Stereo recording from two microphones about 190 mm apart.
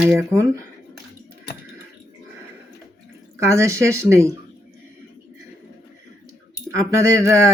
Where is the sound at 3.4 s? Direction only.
15° right (ahead or behind).